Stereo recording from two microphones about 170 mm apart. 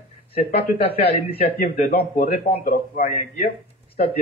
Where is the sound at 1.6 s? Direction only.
45° left (ahead or behind).